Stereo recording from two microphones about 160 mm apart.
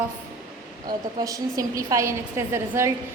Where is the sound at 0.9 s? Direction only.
20° right (ahead or behind).